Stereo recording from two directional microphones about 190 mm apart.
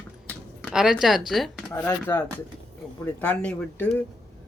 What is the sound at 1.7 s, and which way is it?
Speech, 10° left (ahead or behind).